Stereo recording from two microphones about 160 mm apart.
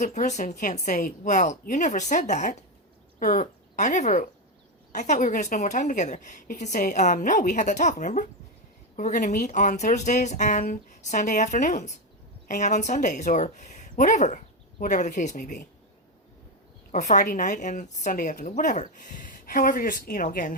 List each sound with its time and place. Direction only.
0.0 s a woman's voice: 50° left (ahead or behind)
17.1 s speech: 50° left (ahead or behind)